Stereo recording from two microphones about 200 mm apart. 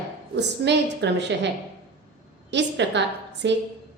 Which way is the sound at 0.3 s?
60° right (ahead or behind).